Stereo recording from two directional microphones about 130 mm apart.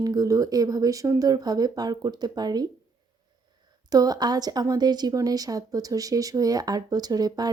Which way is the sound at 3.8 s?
30° right (ahead or behind).